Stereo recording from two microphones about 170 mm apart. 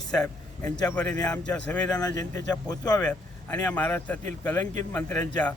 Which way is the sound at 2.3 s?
20° left (ahead or behind).